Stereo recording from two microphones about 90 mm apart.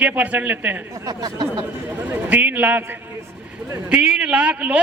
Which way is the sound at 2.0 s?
20° right (ahead or behind).